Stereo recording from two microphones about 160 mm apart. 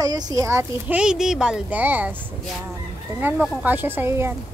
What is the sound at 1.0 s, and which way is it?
Speech, 5° right (ahead or behind).